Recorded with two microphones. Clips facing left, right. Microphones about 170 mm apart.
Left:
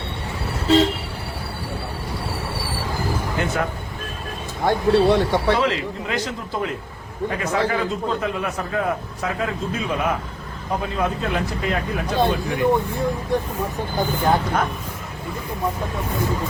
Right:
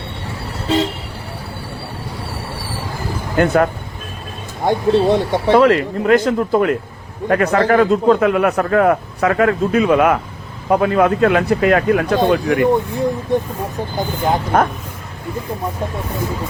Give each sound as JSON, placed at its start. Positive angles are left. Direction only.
{"t": 3.3, "sound": "speech", "side_deg": -60}
{"t": 4.6, "sound": "speech", "side_deg": -20}
{"t": 5.5, "sound": "a man's voice", "side_deg": -55}
{"t": 12.3, "sound": "speech", "side_deg": -55}
{"t": 12.7, "sound": "speech", "side_deg": -20}
{"t": 14.5, "sound": "speech", "side_deg": -55}